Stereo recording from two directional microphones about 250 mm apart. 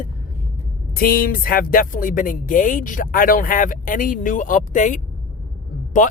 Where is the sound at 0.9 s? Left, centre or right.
Left.